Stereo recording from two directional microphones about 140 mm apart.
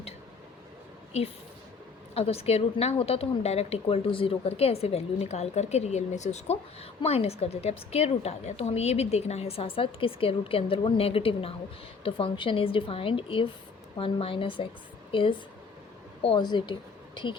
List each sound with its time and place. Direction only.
2.1 s a woman's voice: 45° left (ahead or behind)